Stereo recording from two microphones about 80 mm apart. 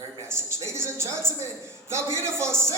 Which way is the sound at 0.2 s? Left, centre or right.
Right.